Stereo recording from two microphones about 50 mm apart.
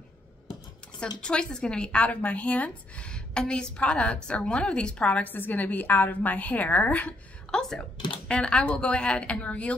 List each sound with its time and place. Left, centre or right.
0.9 s a woman's voice: left
5.2 s a woman's voice: left
8.3 s a woman's voice: centre